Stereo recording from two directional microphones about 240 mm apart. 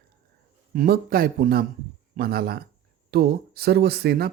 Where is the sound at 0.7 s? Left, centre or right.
Right.